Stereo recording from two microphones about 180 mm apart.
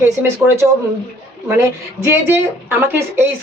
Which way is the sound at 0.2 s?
10° right (ahead or behind).